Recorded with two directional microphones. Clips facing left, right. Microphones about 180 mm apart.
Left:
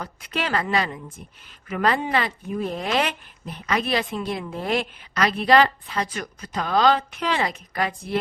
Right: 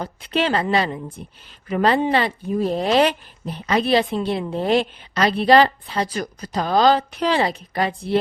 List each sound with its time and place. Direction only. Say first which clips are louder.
0.0 s a woman's voice: right 7 dB; 30° right (ahead or behind)